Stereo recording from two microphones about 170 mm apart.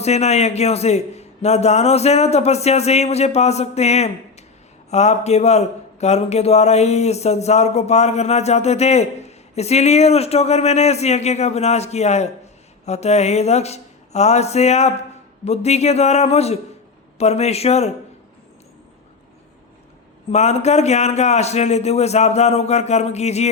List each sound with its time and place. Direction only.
0.0 s a man's voice: 40° left (ahead or behind)
20.3 s a man's voice: 40° left (ahead or behind)